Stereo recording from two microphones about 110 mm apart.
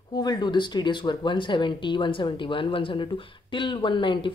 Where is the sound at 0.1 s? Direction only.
40° left (ahead or behind).